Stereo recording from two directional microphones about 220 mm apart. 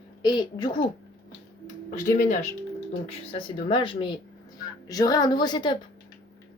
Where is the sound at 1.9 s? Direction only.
35° left (ahead or behind).